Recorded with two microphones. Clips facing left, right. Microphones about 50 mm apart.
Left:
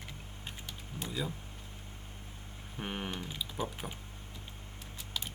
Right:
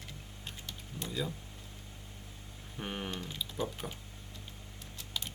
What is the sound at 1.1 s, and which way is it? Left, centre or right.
Speech, centre.